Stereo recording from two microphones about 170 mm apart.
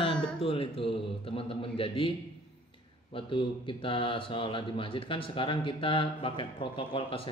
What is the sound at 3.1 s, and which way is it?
Speech, 30° left (ahead or behind).